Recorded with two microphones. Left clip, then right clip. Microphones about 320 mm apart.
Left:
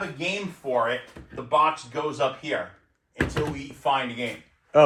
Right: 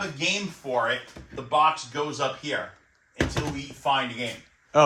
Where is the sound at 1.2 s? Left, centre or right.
Centre.